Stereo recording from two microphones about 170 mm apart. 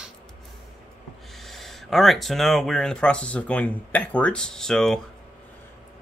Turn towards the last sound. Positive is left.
turn(degrees=5)  # may be behind; listen again after turning